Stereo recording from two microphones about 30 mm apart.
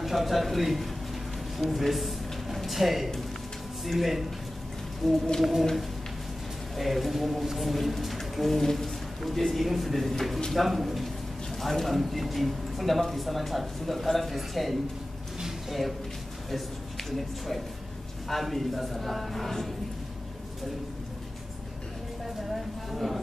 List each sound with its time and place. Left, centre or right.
0.0 s speech: centre
6.8 s speech: centre
18.3 s speech: centre
22.5 s a woman's voice: centre